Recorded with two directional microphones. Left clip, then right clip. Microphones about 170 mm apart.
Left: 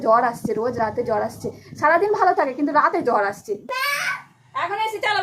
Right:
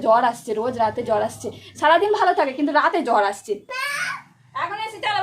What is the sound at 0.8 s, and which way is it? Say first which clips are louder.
A woman's voice: right 1 dB; 25° right (ahead or behind).